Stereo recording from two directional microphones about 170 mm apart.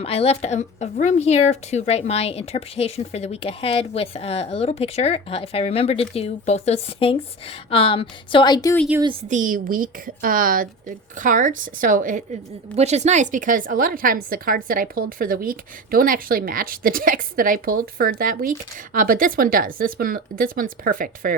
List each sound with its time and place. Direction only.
0.0 s speech: 35° left (ahead or behind)
9.3 s speech: 50° right (ahead or behind)
12.7 s a woman's voice: 40° right (ahead or behind)